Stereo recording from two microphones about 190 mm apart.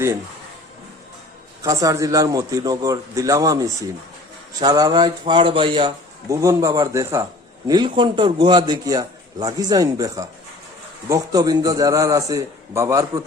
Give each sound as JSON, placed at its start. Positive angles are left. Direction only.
{"t": 1.6, "sound": "a man's voice", "side_deg": -15}